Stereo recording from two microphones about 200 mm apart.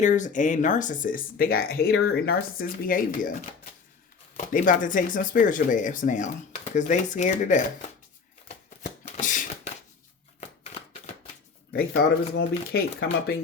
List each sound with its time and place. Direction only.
0.0 s speech: 40° left (ahead or behind)
4.4 s speech: 40° left (ahead or behind)
8.4 s shuffling cards: 40° left (ahead or behind)
12.4 s speech: 50° left (ahead or behind)